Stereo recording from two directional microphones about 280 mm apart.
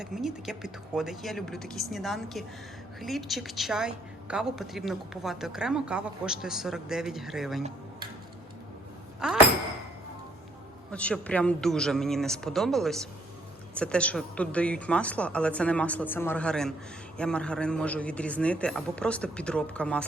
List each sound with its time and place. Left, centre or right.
0.0 s a woman's voice: centre
9.2 s a woman's voice: centre
10.9 s a woman's voice: centre